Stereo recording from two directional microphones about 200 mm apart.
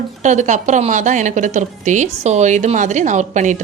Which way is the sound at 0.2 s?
35° right (ahead or behind).